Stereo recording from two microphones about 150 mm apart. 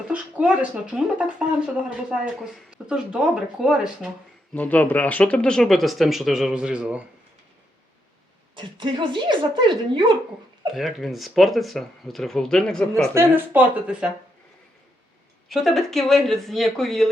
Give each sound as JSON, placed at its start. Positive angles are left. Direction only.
{"t": 0.1, "sound": "speech", "side_deg": -5}
{"t": 4.5, "sound": "speech", "side_deg": 10}
{"t": 8.5, "sound": "a woman's voice", "side_deg": -35}
{"t": 10.8, "sound": "speech", "side_deg": 0}
{"t": 13.1, "sound": "speech", "side_deg": -10}
{"t": 15.4, "sound": "speech", "side_deg": 0}